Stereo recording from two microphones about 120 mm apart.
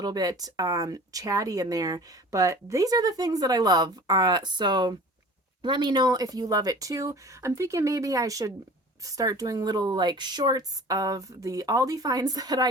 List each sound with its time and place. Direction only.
0.0 s speech: 30° right (ahead or behind)